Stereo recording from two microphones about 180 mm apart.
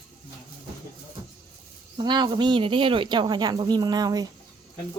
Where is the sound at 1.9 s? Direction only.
25° right (ahead or behind).